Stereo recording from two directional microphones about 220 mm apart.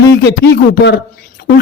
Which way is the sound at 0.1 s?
50° left (ahead or behind).